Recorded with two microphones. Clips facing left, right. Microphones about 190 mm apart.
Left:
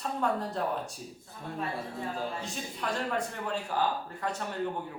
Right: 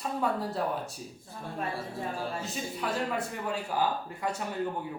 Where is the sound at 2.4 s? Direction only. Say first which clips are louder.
Right 2 dB; 5° right (ahead or behind).